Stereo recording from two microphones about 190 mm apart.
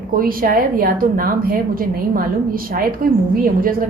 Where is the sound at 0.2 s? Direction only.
50° right (ahead or behind).